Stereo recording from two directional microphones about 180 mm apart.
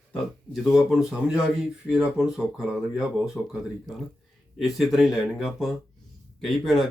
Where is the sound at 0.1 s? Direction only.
Centre (ahead or behind).